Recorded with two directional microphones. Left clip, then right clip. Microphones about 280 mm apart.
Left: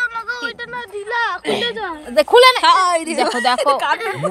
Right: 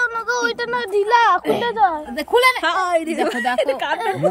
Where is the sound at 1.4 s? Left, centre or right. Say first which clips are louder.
Right 4 dB; centre.